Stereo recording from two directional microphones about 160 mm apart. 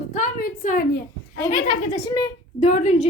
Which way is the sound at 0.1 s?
55° left (ahead or behind).